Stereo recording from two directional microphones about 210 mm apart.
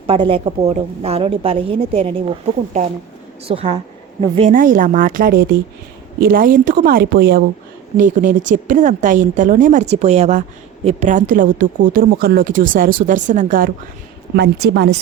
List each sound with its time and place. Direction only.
0.1 s a woman's voice: 25° right (ahead or behind)
3.5 s a woman's voice: 25° right (ahead or behind); by 7.4 s 50° right (ahead or behind)
7.9 s speech: 35° right (ahead or behind)
14.3 s a woman's voice: 50° right (ahead or behind)